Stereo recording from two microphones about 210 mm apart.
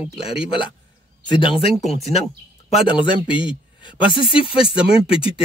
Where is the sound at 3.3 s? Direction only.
20° left (ahead or behind).